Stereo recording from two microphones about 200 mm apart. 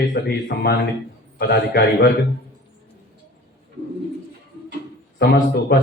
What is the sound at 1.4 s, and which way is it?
Speech, 55° left (ahead or behind).